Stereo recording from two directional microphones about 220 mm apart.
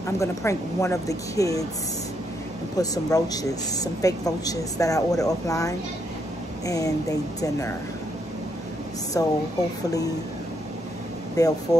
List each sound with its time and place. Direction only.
0.0 s a woman's voice: 15° left (ahead or behind)
2.8 s a woman's voice: 15° left (ahead or behind)
9.1 s a woman's voice: 15° left (ahead or behind)
11.3 s a woman's voice: 15° left (ahead or behind)